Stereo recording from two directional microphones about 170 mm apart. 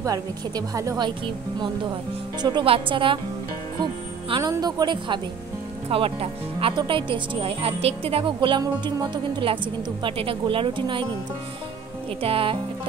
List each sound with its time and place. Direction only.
0.0 s a woman's voice: 20° right (ahead or behind)
12.2 s speech: 30° right (ahead or behind)